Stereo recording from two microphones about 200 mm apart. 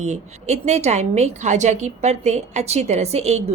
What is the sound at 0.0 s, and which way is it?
A woman's voice, 35° right (ahead or behind).